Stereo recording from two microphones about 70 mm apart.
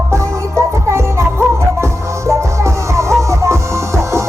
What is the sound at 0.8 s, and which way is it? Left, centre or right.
Music, right.